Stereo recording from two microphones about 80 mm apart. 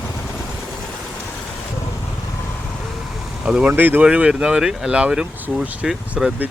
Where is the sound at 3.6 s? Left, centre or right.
Right.